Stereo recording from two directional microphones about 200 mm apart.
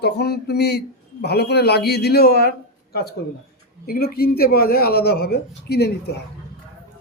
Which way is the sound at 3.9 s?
50° left (ahead or behind).